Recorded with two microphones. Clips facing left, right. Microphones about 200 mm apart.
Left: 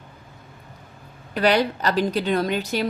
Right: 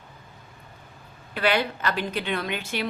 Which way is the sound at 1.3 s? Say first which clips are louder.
Left 5 dB; 40° left (ahead or behind).